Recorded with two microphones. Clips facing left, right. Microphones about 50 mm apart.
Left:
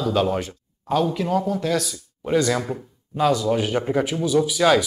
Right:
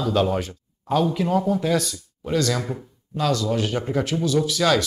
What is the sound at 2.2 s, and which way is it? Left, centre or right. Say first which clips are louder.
Speech: left 3 dB; centre.